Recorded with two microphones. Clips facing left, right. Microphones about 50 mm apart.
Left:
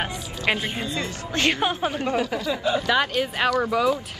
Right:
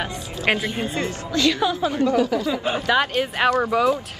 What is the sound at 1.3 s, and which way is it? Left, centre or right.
Speech, left.